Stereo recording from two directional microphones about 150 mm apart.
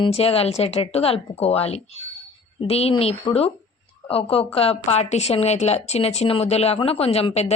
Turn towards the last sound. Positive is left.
turn(degrees=45)  # may be behind; listen again after turning